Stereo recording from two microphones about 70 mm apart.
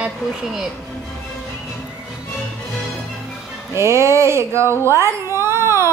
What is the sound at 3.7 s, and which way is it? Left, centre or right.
A woman's voice, right.